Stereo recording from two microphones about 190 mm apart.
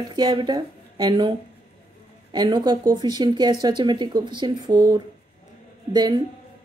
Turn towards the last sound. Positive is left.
turn(degrees=-20)  # may be behind; listen again after turning